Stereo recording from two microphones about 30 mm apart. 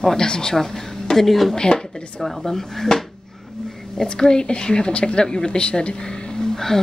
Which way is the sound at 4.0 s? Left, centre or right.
Left.